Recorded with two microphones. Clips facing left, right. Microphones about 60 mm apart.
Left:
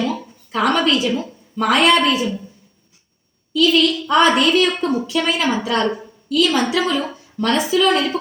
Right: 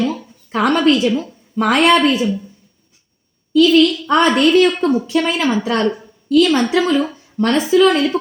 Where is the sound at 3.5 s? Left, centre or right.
Right.